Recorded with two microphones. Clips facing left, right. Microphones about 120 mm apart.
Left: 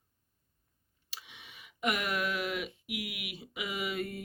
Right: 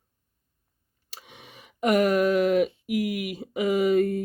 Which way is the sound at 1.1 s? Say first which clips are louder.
Right 5 dB; 45° right (ahead or behind).